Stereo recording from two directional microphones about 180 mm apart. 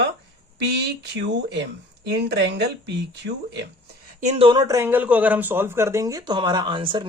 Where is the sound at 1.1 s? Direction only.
70° right (ahead or behind).